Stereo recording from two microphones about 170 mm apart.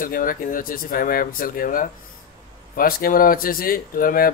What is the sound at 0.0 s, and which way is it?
Speech, 55° left (ahead or behind).